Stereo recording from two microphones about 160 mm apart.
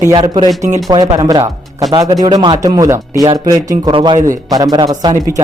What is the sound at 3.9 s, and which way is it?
A man's voice, 30° right (ahead or behind).